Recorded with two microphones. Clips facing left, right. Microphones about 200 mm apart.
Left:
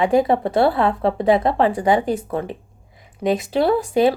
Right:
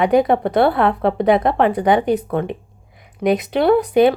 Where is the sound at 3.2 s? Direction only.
25° left (ahead or behind).